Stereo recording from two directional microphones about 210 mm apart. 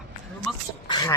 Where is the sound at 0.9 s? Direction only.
20° left (ahead or behind).